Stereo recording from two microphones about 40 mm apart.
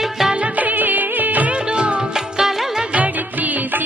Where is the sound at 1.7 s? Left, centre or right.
Right.